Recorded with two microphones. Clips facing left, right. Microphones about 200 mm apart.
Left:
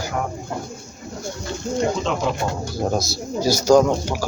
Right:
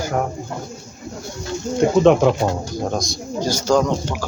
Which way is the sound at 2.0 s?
55° right (ahead or behind).